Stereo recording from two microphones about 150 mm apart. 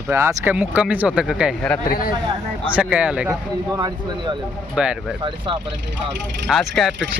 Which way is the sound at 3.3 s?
25° right (ahead or behind).